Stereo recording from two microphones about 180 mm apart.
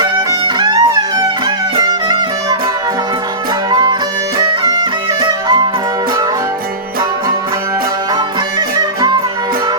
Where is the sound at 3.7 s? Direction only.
20° right (ahead or behind).